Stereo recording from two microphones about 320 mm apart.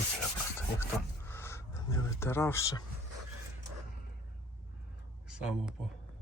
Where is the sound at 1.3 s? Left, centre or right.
Centre.